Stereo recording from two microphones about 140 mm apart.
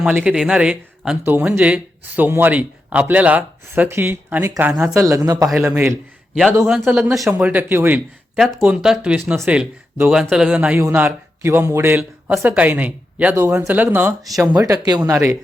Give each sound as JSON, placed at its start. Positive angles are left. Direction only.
{"t": 0.0, "sound": "speech", "side_deg": -10}
{"t": 6.8, "sound": "speech", "side_deg": -5}
{"t": 10.1, "sound": "a man's voice", "side_deg": -5}
{"t": 14.2, "sound": "a man's voice", "side_deg": 0}
{"t": 14.4, "sound": "speech", "side_deg": -25}